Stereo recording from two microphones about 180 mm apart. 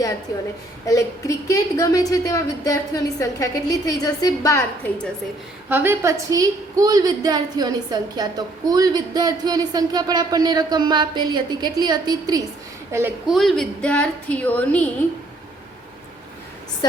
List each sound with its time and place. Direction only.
0.9 s a woman's voice: 15° left (ahead or behind)
5.6 s a woman's voice: 10° right (ahead or behind)
13.2 s a woman's voice: centre (ahead or behind)